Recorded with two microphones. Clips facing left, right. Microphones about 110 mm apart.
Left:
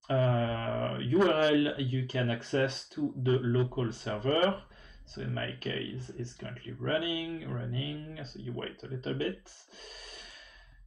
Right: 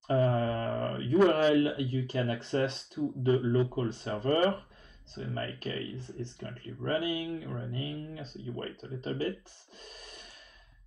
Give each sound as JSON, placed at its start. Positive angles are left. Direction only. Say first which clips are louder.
{"t": 0.1, "sound": "a sound", "louder": "right 1 dB", "side_deg": -35}
{"t": 2.1, "sound": "speech", "louder": "even", "side_deg": -30}
{"t": 9.8, "sound": "snort", "louder": "even", "side_deg": -35}